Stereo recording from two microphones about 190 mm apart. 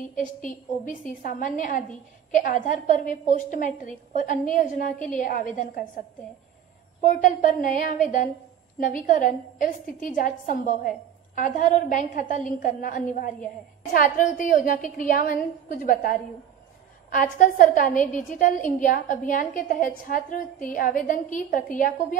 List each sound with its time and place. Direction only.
0.0 s a woman's voice: 45° left (ahead or behind)